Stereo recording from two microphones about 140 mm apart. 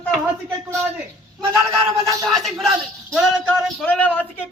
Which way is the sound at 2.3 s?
Centre (ahead or behind).